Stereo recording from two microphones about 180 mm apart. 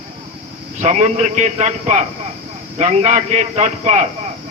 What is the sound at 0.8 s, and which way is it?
A man's voice, 40° right (ahead or behind).